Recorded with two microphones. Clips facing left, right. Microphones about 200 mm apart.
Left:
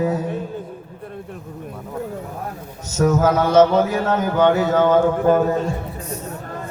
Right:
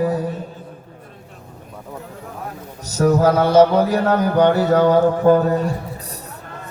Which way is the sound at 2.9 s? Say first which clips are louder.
Right 2 dB; 35° right (ahead or behind).